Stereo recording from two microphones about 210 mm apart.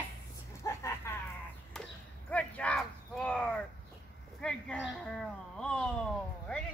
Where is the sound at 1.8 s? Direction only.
5° left (ahead or behind).